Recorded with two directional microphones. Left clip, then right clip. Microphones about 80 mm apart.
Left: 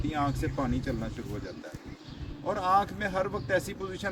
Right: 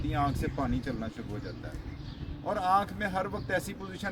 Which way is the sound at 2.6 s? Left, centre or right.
Right.